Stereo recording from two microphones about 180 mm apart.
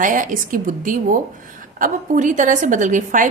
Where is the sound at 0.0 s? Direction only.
45° right (ahead or behind).